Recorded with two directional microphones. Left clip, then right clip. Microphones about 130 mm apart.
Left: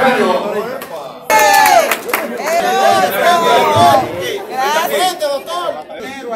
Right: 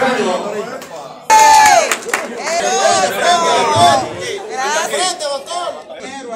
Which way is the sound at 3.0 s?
25° right (ahead or behind).